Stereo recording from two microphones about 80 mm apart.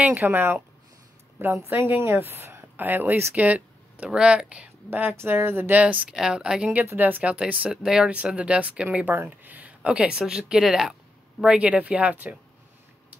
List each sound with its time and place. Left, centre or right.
0.1 s speech: right